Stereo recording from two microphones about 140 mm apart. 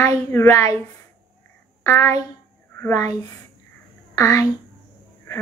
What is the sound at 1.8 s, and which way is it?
A woman's voice, 20° left (ahead or behind).